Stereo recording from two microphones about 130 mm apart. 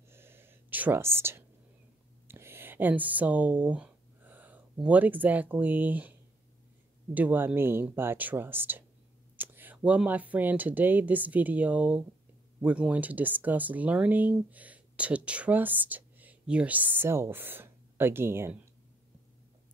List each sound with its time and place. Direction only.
0.1 s whispering: 20° right (ahead or behind)
2.2 s speech: 20° right (ahead or behind)
7.2 s speech: 15° right (ahead or behind)